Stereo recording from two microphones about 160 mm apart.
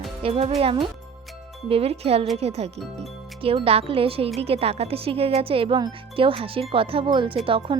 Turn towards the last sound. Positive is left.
turn(degrees=-35)  # may be behind; listen again after turning